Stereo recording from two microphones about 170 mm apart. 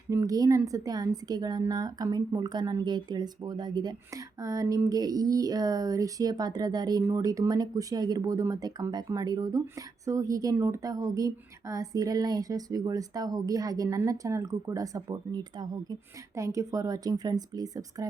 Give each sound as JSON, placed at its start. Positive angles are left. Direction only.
{"t": 0.1, "sound": "a woman's voice", "side_deg": -20}